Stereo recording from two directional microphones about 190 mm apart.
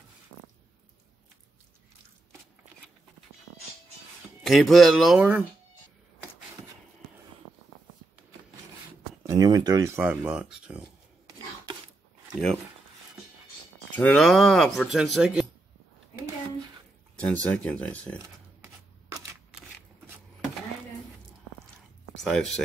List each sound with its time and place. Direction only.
4.4 s speech: centre (ahead or behind)
9.2 s speech: 20° right (ahead or behind)
13.9 s speech: 5° left (ahead or behind)
17.2 s speech: 5° left (ahead or behind)
18.2 s shuffling cards: 15° right (ahead or behind)
22.1 s speech: centre (ahead or behind)